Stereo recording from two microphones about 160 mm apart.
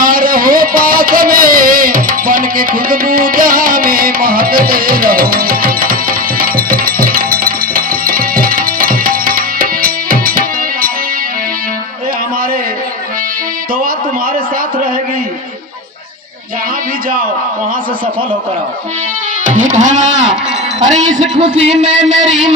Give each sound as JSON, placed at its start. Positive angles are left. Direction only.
{"t": 0.0, "sound": "music", "side_deg": -65}
{"t": 19.5, "sound": "music", "side_deg": -50}
{"t": 20.8, "sound": "a man's voice", "side_deg": -50}
{"t": 21.7, "sound": "speech", "side_deg": -5}